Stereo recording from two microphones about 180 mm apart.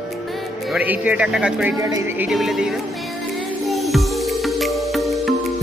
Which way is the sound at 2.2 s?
Centre (ahead or behind).